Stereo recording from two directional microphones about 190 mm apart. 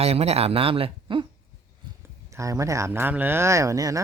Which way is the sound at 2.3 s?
15° right (ahead or behind).